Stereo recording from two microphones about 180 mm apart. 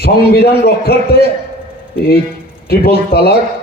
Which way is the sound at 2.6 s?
60° left (ahead or behind).